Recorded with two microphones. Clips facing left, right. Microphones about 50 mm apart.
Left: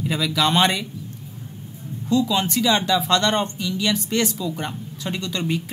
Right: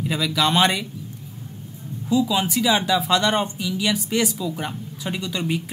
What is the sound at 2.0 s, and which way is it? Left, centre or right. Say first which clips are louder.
Speech: even; centre.